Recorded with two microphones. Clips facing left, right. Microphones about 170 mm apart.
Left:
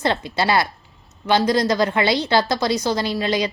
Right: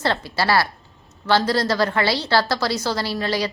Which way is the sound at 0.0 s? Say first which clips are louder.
Left 2 dB; 20° left (ahead or behind).